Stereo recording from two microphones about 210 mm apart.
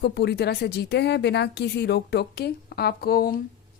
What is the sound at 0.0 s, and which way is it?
A woman's voice, 50° left (ahead or behind).